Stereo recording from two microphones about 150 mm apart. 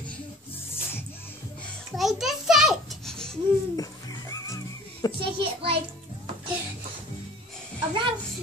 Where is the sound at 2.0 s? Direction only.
Centre (ahead or behind).